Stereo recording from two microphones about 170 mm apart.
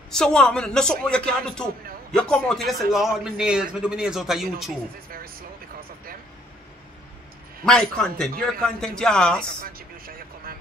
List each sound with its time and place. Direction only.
0.1 s a man's voice: 5° left (ahead or behind)
5.1 s vehicle: 60° right (ahead or behind)
7.6 s a man's voice: 5° left (ahead or behind)
9.6 s vehicle: 60° right (ahead or behind)